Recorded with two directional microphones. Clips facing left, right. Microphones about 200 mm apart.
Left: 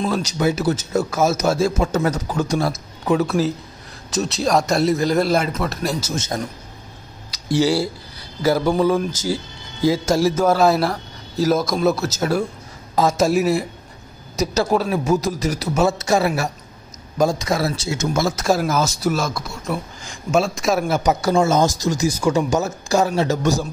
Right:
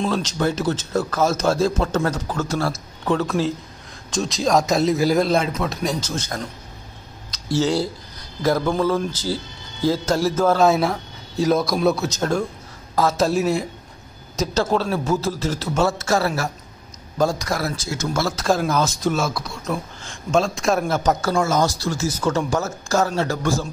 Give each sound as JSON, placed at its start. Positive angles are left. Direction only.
{"t": 0.0, "sound": "a man's voice", "side_deg": 10}
{"t": 6.1, "sound": "a man's voice", "side_deg": 20}
{"t": 18.4, "sound": "a man's voice", "side_deg": 5}
{"t": 21.0, "sound": "a man's voice", "side_deg": 15}